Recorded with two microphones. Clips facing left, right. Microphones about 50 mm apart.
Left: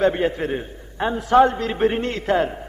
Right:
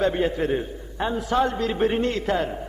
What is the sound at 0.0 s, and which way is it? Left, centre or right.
A man's voice, left.